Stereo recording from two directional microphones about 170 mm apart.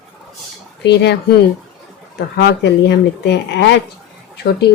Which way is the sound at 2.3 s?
90° left.